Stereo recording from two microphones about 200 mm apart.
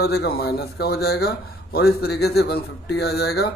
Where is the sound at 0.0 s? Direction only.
50° left (ahead or behind).